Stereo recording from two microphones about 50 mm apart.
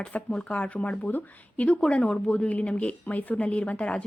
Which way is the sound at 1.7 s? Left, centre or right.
Left.